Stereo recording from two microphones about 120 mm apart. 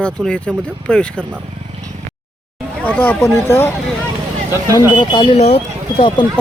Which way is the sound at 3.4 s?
25° left (ahead or behind).